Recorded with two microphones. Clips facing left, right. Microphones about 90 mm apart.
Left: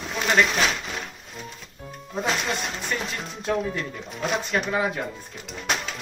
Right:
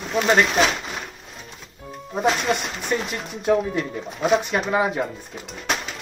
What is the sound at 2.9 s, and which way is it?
Speech, 15° right (ahead or behind).